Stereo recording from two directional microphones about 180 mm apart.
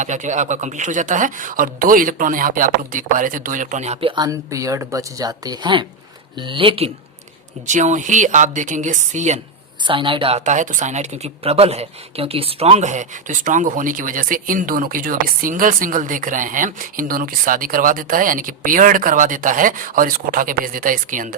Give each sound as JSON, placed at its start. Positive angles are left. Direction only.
{"t": 0.0, "sound": "speech", "side_deg": -45}
{"t": 7.7, "sound": "speech", "side_deg": -45}
{"t": 9.8, "sound": "speech", "side_deg": -30}